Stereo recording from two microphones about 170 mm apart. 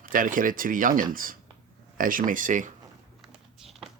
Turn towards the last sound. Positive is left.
turn(degrees=0)  # may be behind; listen again after turning